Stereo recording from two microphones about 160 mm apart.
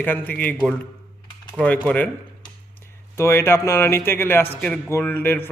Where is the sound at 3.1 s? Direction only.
15° left (ahead or behind).